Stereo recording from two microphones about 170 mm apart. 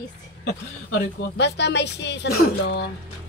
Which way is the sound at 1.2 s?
80° left.